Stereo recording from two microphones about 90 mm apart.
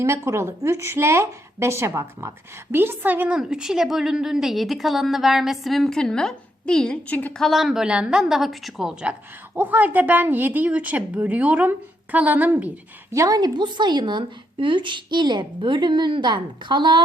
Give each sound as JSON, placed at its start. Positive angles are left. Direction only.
{"t": 0.0, "sound": "a woman's voice", "side_deg": -35}
{"t": 7.3, "sound": "a woman's voice", "side_deg": 0}
{"t": 9.6, "sound": "a woman's voice", "side_deg": -20}
{"t": 13.1, "sound": "a woman's voice", "side_deg": -40}